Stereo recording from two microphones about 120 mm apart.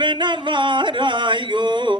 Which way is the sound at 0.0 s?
40° right (ahead or behind).